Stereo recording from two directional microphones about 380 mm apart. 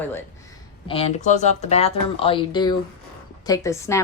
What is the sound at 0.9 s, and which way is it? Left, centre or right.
A woman's voice, centre.